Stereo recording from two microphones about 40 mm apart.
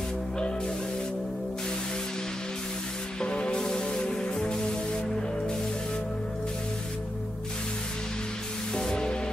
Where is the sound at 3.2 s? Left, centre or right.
Left.